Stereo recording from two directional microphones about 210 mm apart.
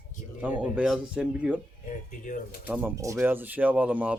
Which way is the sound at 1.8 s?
40° left (ahead or behind).